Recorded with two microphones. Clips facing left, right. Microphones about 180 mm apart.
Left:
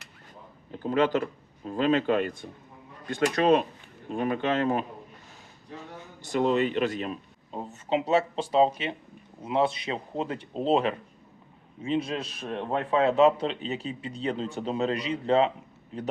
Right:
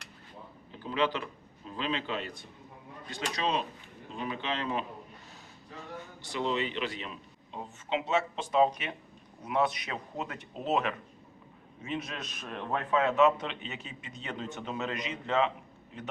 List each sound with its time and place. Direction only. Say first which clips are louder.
0.8 s speech: left 7 dB; 45° left (ahead or behind)
6.2 s a man's voice: left 8 dB; 45° left (ahead or behind)